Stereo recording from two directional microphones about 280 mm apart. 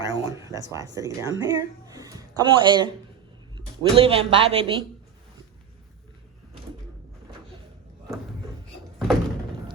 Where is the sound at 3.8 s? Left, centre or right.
Centre.